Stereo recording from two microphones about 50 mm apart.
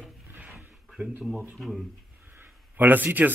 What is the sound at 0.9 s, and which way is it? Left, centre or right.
Speech, centre.